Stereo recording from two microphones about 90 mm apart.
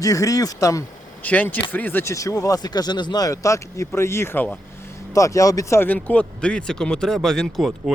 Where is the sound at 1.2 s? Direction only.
20° left (ahead or behind).